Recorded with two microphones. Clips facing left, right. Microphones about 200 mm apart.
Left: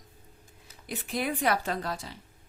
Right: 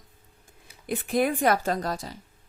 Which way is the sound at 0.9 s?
50° right (ahead or behind).